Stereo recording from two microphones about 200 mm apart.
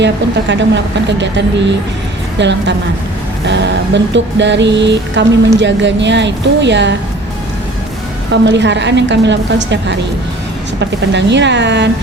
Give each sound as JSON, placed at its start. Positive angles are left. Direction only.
{"t": 0.0, "sound": "music", "side_deg": -60}
{"t": 8.3, "sound": "music", "side_deg": -60}